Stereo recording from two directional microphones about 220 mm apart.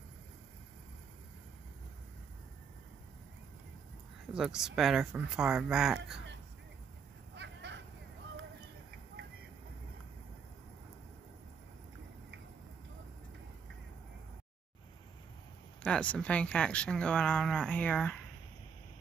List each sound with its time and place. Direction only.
4.3 s speech: 5° right (ahead or behind)
7.3 s a sound: 55° right (ahead or behind)
15.8 s speech: 5° left (ahead or behind)